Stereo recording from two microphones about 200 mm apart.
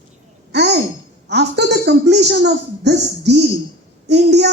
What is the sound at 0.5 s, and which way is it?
Sigh, 55° right (ahead or behind).